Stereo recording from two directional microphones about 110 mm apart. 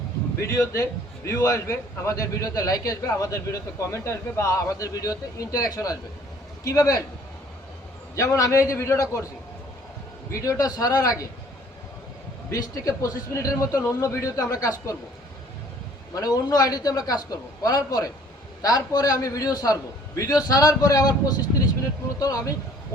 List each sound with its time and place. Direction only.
0.4 s a man's voice: 25° left (ahead or behind)
8.1 s a man's voice: 30° left (ahead or behind)
10.3 s a man's voice: 30° left (ahead or behind)
12.5 s a man's voice: 30° left (ahead or behind)
16.1 s a man's voice: 35° left (ahead or behind)